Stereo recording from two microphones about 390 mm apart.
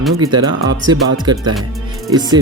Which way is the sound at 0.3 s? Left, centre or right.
Centre.